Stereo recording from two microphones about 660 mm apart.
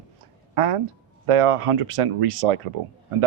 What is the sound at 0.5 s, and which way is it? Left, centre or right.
Speech, right.